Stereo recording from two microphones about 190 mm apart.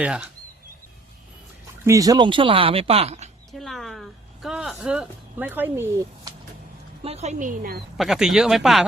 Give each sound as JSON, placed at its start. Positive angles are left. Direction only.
{"t": 0.0, "sound": "speech", "side_deg": -5}
{"t": 1.8, "sound": "speech", "side_deg": -15}
{"t": 3.6, "sound": "a sound", "side_deg": 0}
{"t": 7.0, "sound": "speech", "side_deg": -35}
{"t": 7.9, "sound": "speech", "side_deg": 0}